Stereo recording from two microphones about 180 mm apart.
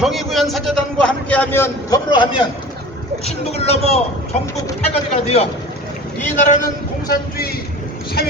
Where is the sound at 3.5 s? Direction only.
35° left (ahead or behind).